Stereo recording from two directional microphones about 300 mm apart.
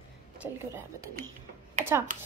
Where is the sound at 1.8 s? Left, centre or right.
Right.